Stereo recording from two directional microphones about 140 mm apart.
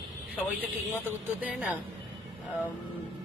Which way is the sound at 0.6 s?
10° right (ahead or behind).